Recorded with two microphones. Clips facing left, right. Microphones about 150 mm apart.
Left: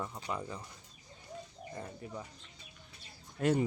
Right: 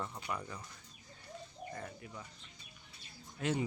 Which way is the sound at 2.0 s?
35° left (ahead or behind).